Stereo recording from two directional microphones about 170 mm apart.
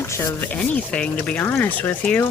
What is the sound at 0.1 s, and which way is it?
Speech, 15° left (ahead or behind).